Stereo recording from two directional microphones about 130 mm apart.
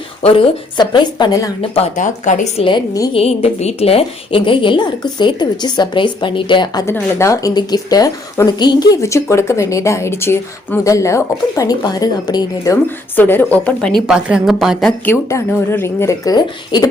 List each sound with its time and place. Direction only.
0.2 s a woman's voice: 50° left (ahead or behind)
0.8 s a woman's voice: 35° left (ahead or behind)
2.0 s speech: 70° left (ahead or behind)
2.6 s a woman's voice: 30° left (ahead or behind)
3.1 s a woman's voice: 50° left (ahead or behind)
6.8 s speech: 20° left (ahead or behind)
13.1 s speech: 15° left (ahead or behind)
14.1 s a woman's voice: 5° right (ahead or behind)
15.0 s speech: 20° left (ahead or behind)